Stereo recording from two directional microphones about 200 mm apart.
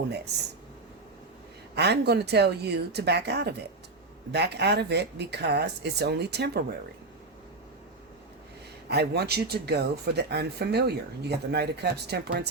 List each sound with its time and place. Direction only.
1.7 s speech: 55° right (ahead or behind)
8.9 s speech: 55° right (ahead or behind)